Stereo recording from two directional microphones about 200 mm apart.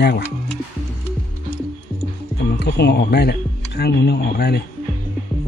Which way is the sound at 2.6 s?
55° left (ahead or behind).